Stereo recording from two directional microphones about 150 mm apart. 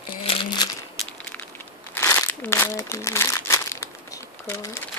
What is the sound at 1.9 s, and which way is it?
Crumpling, 15° left (ahead or behind).